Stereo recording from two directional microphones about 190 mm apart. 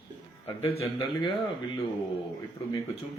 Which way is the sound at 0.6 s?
30° left (ahead or behind).